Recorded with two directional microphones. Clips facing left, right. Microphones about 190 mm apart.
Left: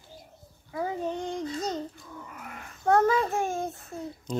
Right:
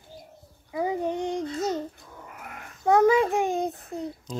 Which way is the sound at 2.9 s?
10° right (ahead or behind).